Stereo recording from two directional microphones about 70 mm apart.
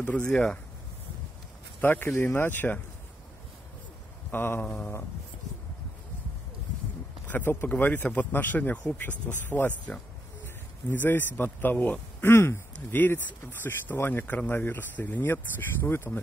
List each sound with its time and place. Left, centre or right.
0.0 s speech: left
1.8 s speech: left
4.3 s speech: left
7.2 s speech: left
12.2 s speech: left